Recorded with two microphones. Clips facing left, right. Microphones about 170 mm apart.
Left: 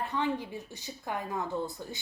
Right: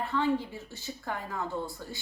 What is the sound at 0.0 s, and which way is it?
A woman's voice, 15° left (ahead or behind).